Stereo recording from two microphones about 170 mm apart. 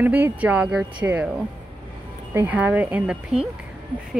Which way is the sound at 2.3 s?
10° right (ahead or behind).